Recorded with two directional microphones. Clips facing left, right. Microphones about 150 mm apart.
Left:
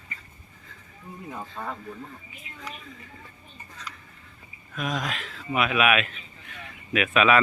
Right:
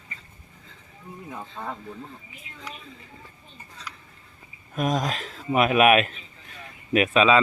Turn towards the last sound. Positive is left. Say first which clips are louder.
# right 3 dB
turn(degrees=-40)  # may be behind; listen again after turning